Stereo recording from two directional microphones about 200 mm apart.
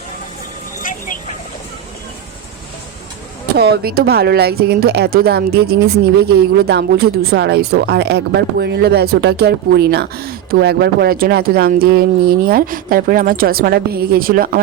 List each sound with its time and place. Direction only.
0.8 s vehicle: 40° left (ahead or behind)
3.6 s a woman's voice: 50° right (ahead or behind)